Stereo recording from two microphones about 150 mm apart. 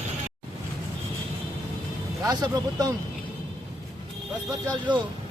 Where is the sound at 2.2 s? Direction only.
25° right (ahead or behind).